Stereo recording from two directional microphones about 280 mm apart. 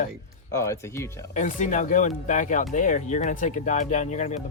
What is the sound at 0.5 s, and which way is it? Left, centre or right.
Speech, centre.